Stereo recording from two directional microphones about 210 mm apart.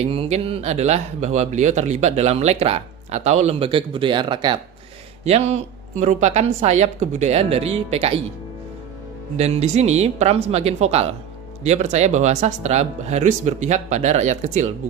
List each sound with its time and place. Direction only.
0.0 s speech: 30° right (ahead or behind)
9.4 s speech: 30° right (ahead or behind)